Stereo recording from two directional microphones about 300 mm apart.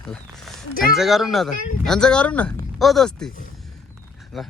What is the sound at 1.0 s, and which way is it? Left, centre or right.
Speech, centre.